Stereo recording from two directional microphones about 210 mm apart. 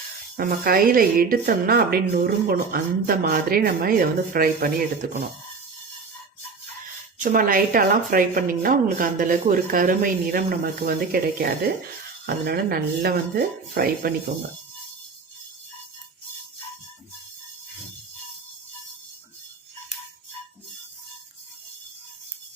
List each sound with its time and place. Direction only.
0.3 s speech: 45° right (ahead or behind)
7.2 s speech: 40° right (ahead or behind)